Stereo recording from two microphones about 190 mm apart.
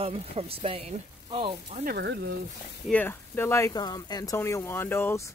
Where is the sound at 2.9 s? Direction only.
10° left (ahead or behind).